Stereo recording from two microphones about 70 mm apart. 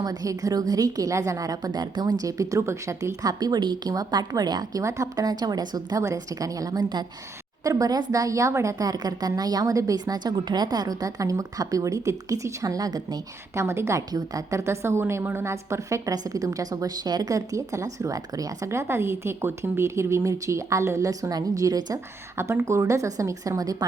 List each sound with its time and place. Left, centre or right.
0.0 s a woman's voice: right
4.8 s a woman's voice: right
6.0 s a woman's voice: right
13.6 s a woman's voice: right
14.1 s a woman's voice: right
14.5 s a woman's voice: right
15.4 s a woman's voice: right
16.1 s a woman's voice: right
21.9 s a woman's voice: right